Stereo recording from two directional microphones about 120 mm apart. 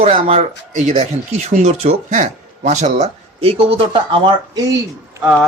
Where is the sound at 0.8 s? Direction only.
80° right.